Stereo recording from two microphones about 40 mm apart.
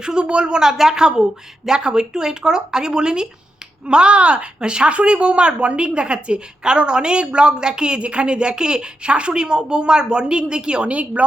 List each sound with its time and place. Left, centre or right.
0.0 s a woman's voice: right
0.6 s a woman's voice: centre